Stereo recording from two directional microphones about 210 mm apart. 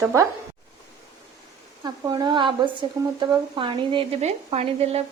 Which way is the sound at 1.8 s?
20° right (ahead or behind).